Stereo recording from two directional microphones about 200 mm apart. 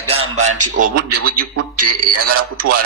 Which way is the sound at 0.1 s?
30° right (ahead or behind).